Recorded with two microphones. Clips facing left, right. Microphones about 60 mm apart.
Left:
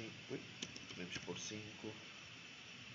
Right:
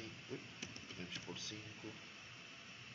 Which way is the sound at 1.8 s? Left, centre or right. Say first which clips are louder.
Left 2 dB; right.